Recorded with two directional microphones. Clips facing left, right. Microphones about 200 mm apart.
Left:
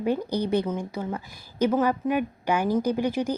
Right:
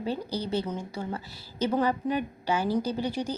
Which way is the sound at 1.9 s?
10° left (ahead or behind).